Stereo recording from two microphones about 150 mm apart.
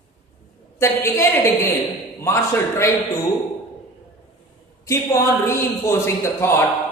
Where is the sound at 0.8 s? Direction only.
20° left (ahead or behind).